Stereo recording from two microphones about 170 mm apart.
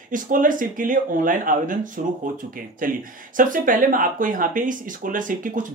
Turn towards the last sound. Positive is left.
turn(degrees=-50)  # may be behind; listen again after turning